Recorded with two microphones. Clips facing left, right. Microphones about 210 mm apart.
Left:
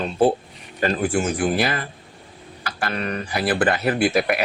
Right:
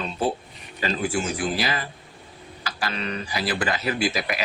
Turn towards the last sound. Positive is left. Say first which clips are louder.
# left 6 dB
turn(degrees=55)  # may be behind; listen again after turning